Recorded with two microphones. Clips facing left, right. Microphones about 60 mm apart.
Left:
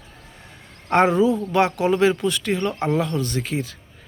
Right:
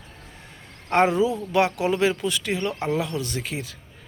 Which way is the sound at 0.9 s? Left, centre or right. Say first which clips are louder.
Left 3 dB; centre.